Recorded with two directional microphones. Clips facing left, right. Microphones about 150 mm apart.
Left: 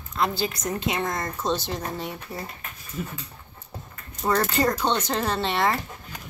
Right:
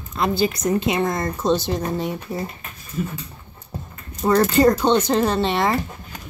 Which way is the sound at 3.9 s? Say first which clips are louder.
Right 6 dB; 15° right (ahead or behind).